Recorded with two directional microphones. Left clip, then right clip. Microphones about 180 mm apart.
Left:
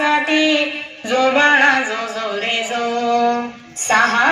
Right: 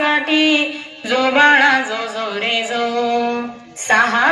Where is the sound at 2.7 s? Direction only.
45° left (ahead or behind).